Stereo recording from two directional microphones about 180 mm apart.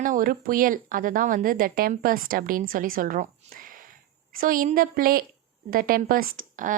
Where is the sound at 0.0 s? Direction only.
50° right (ahead or behind).